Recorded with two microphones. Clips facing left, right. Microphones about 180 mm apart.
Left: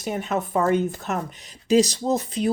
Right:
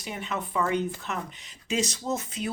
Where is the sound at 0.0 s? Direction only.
45° left (ahead or behind).